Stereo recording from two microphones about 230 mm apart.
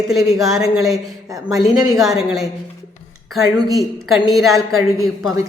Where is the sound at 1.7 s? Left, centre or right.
Centre.